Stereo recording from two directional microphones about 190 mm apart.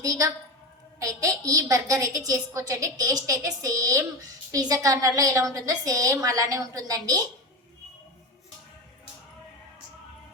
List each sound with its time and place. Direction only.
0.0 s a woman's voice: 20° right (ahead or behind)